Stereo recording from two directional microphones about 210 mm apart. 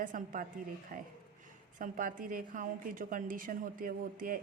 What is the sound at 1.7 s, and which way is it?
A woman's voice, 40° right (ahead or behind).